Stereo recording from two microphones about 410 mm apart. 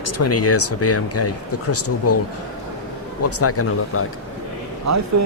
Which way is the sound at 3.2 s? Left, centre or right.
Left.